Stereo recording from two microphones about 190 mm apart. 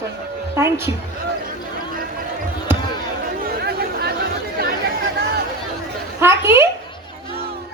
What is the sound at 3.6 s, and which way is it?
Chatter, 55° right (ahead or behind).